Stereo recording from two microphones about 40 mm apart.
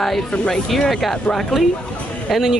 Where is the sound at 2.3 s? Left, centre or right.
Centre.